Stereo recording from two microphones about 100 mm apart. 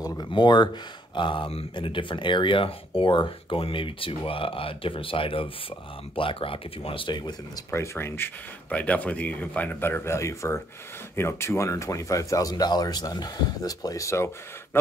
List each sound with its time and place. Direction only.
0.2 s speech: 50° left (ahead or behind); by 1.7 s 70° left (ahead or behind)
1.8 s speech: 55° left (ahead or behind)
7.7 s speech: 30° left (ahead or behind)
8.6 s speech: 15° left (ahead or behind)